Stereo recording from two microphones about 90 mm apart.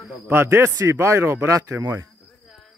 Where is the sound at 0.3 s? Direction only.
30° right (ahead or behind).